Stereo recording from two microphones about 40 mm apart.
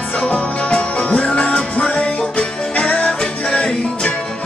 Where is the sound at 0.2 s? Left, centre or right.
Left.